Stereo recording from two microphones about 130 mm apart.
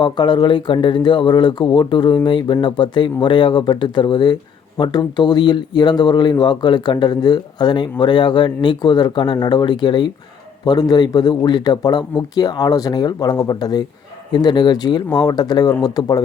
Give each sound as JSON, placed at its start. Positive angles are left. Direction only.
{"t": 0.0, "sound": "speech", "side_deg": 35}